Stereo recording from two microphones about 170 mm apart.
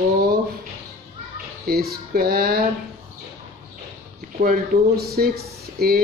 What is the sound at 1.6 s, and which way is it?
Speech, 65° right (ahead or behind).